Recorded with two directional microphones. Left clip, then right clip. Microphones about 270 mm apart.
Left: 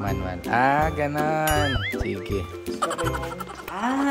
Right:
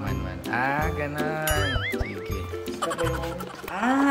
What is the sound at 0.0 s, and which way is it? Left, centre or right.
Music, left.